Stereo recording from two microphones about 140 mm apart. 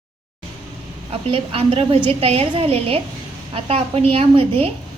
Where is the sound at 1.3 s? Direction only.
40° right (ahead or behind).